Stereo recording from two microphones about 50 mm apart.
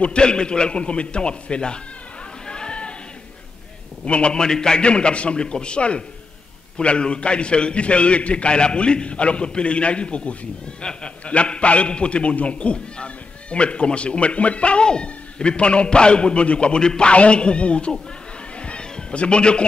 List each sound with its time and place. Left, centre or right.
0.0 s a man's voice: centre
2.4 s a sound: centre
4.0 s a man's voice: left
18.6 s cat: centre